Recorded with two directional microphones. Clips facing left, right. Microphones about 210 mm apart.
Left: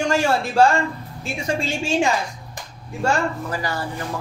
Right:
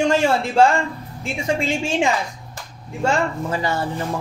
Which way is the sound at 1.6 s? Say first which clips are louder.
Left 1 dB; 20° right (ahead or behind).